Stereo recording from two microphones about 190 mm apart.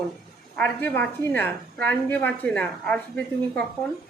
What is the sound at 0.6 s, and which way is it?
A woman's voice, 10° left (ahead or behind).